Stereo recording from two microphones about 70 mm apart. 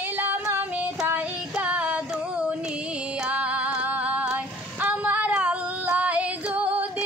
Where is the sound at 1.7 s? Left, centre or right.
Centre.